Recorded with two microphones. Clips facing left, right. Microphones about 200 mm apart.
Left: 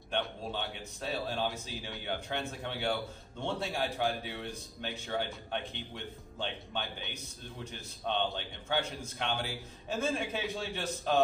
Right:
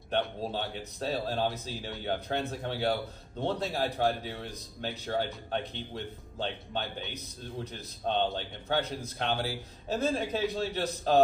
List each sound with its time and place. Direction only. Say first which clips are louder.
0.4 s speech: right 4 dB; 35° right (ahead or behind)
8.4 s speech: right 3 dB; 40° right (ahead or behind)